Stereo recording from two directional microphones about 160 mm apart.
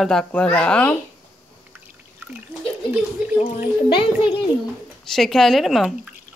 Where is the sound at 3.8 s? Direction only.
35° left (ahead or behind).